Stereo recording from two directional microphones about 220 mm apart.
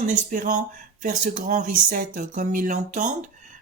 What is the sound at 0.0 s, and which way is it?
Speech, 35° right (ahead or behind).